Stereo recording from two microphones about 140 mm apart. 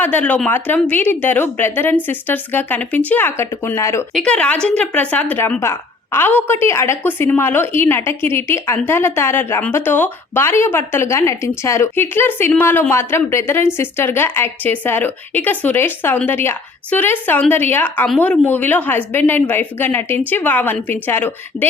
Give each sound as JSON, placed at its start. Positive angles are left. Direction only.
{"t": 0.0, "sound": "a woman's voice", "side_deg": 10}
{"t": 4.1, "sound": "a woman's voice", "side_deg": 5}